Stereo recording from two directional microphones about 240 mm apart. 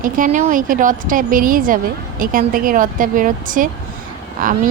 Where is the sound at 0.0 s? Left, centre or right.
Right.